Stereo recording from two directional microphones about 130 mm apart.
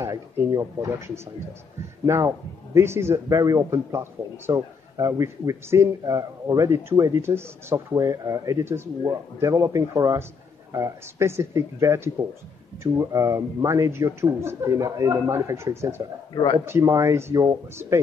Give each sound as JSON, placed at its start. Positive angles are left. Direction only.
{"t": 0.0, "sound": "a man's voice", "side_deg": -30}